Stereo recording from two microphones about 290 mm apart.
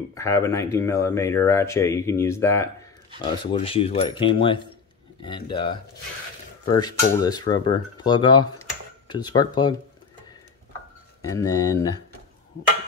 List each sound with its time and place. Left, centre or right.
0.1 s speech: centre
11.2 s speech: centre